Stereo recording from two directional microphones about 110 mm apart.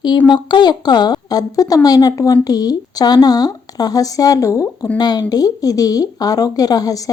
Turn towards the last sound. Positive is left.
turn(degrees=35)  # may be behind; listen again after turning